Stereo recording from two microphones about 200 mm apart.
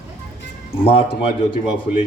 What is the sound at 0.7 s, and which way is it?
Speech, 30° left (ahead or behind).